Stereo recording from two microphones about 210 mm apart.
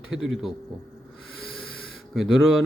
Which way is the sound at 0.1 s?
Centre (ahead or behind).